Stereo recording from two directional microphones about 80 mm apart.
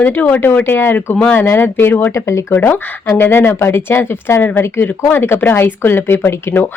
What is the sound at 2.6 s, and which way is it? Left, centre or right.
Speech, left.